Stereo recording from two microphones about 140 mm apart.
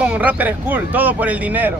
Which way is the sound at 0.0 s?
10° right (ahead or behind).